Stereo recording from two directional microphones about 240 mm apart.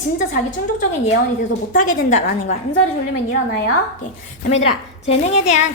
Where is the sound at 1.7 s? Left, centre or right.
Left.